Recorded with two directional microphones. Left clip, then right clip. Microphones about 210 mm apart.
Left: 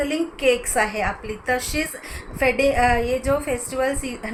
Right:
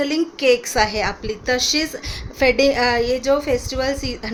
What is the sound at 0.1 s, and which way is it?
A woman's voice, 50° right (ahead or behind).